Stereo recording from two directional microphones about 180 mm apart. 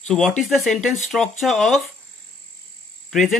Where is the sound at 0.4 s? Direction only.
Centre (ahead or behind).